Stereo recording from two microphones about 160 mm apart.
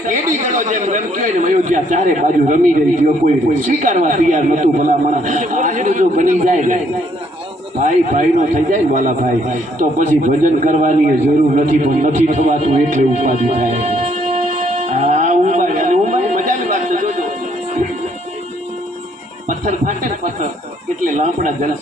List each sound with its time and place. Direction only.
0.1 s a man's voice: 50° right (ahead or behind)
7.8 s a man's voice: 50° right (ahead or behind)
11.5 s a sound: 55° right (ahead or behind)
19.5 s a man's voice: 55° right (ahead or behind)